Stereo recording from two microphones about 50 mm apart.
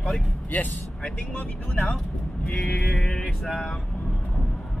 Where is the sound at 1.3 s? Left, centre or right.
Left.